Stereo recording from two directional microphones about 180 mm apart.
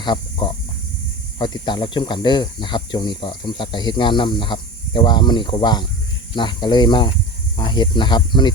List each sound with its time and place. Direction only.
0.0 s speech: 25° left (ahead or behind)